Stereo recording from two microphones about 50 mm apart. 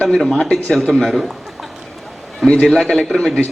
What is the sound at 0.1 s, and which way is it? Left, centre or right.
A man's voice, centre.